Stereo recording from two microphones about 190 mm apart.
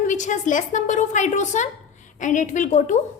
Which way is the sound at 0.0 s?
40° left (ahead or behind).